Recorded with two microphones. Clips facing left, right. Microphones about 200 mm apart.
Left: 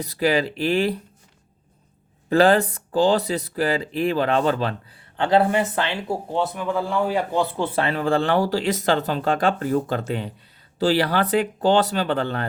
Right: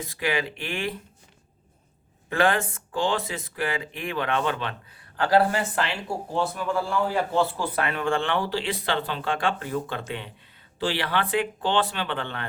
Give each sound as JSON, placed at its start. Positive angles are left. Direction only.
{"t": 0.0, "sound": "speech", "side_deg": 35}
{"t": 2.3, "sound": "speech", "side_deg": 35}
{"t": 5.1, "sound": "speech", "side_deg": 25}